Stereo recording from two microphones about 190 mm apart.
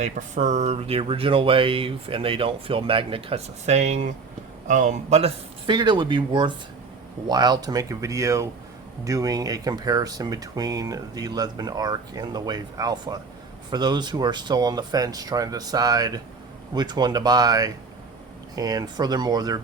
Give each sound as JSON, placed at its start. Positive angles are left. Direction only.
{"t": 0.0, "sound": "speech", "side_deg": -40}